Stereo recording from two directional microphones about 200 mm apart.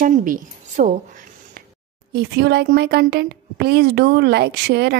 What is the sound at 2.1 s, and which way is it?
Speech, 55° right (ahead or behind).